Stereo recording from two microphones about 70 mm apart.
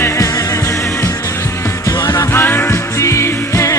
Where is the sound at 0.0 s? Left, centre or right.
Left.